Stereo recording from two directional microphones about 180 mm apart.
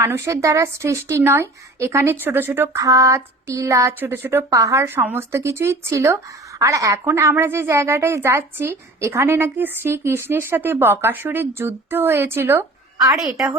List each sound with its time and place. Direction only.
0.0 s a woman's voice: 15° right (ahead or behind)